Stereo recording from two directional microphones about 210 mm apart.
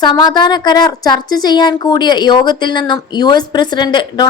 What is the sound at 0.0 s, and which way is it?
A woman's voice, 20° left (ahead or behind).